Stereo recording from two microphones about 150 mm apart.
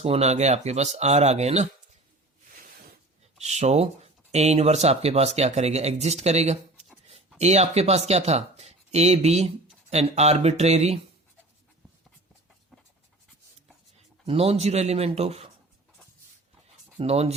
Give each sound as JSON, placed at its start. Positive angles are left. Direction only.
{"t": 0.0, "sound": "speech", "side_deg": -45}
{"t": 3.4, "sound": "speech", "side_deg": -45}
{"t": 14.3, "sound": "speech", "side_deg": -40}
{"t": 17.0, "sound": "speech", "side_deg": -45}